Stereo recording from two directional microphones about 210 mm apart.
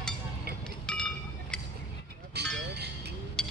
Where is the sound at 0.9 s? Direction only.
5° left (ahead or behind).